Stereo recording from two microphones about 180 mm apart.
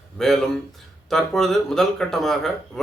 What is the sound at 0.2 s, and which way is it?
Speech, centre (ahead or behind).